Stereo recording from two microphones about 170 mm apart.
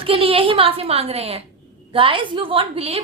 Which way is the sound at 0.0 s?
35° right (ahead or behind).